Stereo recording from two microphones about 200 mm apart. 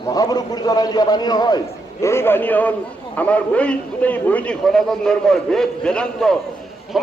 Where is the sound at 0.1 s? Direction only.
20° left (ahead or behind).